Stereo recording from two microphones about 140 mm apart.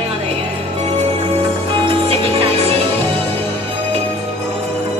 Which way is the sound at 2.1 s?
45° right (ahead or behind).